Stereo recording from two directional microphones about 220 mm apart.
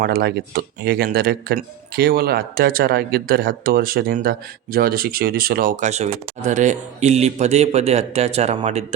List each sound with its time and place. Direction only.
0.0 s speech: 45° right (ahead or behind)